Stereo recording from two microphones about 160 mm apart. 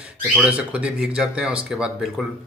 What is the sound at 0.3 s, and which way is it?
Speech, 5° right (ahead or behind).